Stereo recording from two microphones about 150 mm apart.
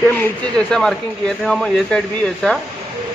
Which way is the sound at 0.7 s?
5° left (ahead or behind).